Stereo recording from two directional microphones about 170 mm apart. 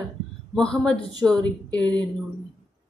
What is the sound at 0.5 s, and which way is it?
Speech, 5° left (ahead or behind).